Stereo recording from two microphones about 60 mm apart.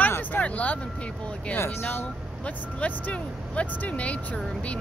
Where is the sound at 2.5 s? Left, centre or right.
Left.